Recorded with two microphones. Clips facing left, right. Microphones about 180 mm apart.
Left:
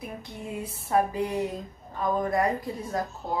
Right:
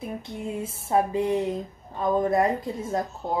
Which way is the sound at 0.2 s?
25° right (ahead or behind).